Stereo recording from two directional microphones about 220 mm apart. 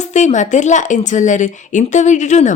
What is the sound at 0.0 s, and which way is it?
Speech, 30° left (ahead or behind).